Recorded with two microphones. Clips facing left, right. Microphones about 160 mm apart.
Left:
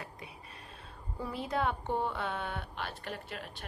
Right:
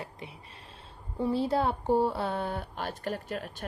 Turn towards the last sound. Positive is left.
turn(degrees=-40)  # may be behind; listen again after turning